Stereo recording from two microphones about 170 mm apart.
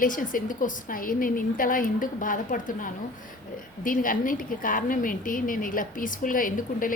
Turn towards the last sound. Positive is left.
turn(degrees=55)  # may be behind; listen again after turning